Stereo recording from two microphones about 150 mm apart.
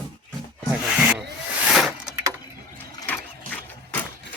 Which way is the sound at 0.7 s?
5° right (ahead or behind).